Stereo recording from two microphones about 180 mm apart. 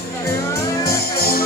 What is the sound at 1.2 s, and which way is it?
Music, 55° left (ahead or behind).